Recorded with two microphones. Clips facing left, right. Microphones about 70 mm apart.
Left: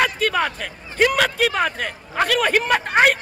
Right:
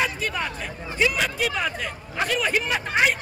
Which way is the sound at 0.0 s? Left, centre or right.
Left.